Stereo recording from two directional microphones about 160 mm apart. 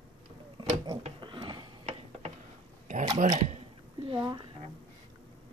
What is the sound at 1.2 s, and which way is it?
Gears, 30° right (ahead or behind).